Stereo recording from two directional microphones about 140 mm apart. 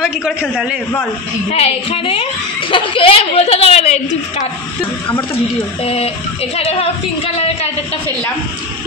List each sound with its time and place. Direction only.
0.0 s a man's voice: 5° right (ahead or behind)
1.5 s a woman's voice: 45° left (ahead or behind)
5.9 s a woman's voice: 45° left (ahead or behind)